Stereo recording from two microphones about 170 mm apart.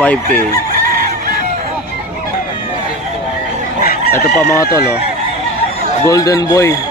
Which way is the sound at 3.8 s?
60° left (ahead or behind).